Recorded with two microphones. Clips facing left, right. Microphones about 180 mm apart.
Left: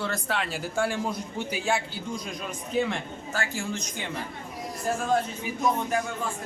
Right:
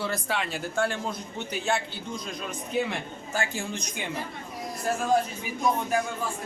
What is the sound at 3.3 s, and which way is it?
Speech, 15° right (ahead or behind).